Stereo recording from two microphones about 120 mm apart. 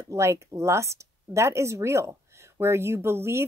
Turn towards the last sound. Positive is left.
turn(degrees=-20)  # may be behind; listen again after turning